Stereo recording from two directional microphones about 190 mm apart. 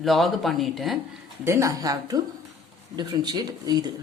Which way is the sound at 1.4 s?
15° right (ahead or behind).